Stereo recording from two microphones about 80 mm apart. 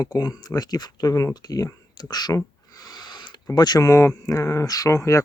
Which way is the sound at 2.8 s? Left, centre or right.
Left.